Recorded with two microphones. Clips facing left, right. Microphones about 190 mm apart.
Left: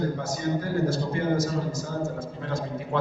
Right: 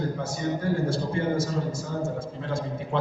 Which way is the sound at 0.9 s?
30° right (ahead or behind).